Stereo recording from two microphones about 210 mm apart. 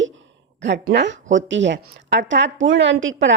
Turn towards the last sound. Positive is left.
turn(degrees=-65)  # may be behind; listen again after turning